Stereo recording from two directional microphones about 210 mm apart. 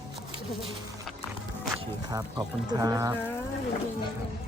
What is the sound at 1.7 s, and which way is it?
Speech, 15° right (ahead or behind).